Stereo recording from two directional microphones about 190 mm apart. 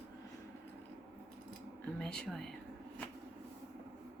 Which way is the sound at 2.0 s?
5° left (ahead or behind).